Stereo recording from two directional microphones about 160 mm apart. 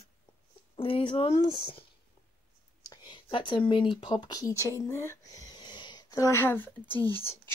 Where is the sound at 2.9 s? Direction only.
30° left (ahead or behind); by 7.1 s 10° left (ahead or behind).